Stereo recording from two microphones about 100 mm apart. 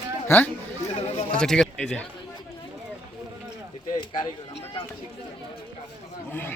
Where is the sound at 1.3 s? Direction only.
5° left (ahead or behind).